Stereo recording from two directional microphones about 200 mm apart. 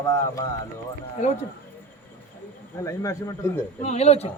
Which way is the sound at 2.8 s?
15° left (ahead or behind).